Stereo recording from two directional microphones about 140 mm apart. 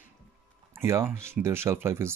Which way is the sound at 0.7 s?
20° right (ahead or behind).